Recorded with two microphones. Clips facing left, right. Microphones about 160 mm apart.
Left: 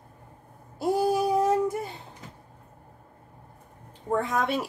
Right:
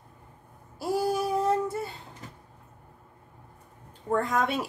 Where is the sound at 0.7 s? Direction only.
20° left (ahead or behind).